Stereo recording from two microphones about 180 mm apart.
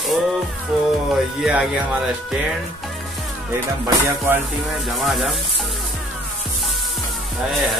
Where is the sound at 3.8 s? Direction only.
15° right (ahead or behind).